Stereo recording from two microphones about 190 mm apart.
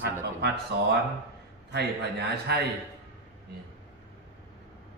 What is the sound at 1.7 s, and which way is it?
Speech, 60° right (ahead or behind).